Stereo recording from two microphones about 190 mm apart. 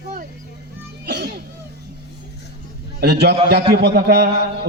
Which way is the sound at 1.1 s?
60° right (ahead or behind).